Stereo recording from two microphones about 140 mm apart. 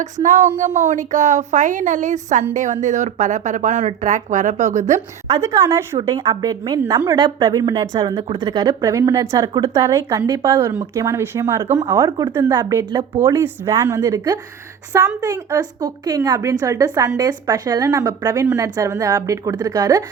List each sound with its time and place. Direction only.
0.0 s a woman's voice: 60° right (ahead or behind)
5.3 s a woman's voice: 25° right (ahead or behind)